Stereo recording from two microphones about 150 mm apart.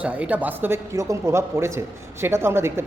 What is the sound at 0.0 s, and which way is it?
Speech, 10° right (ahead or behind).